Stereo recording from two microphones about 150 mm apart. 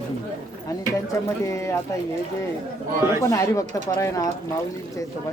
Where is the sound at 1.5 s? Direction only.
20° left (ahead or behind).